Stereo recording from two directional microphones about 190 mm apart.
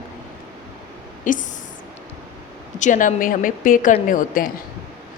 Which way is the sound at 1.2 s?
45° left (ahead or behind).